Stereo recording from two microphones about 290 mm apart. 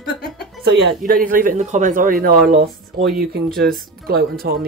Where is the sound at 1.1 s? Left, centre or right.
Right.